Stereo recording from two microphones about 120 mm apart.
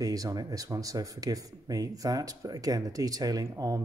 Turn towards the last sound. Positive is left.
turn(degrees=-30)  # may be behind; listen again after turning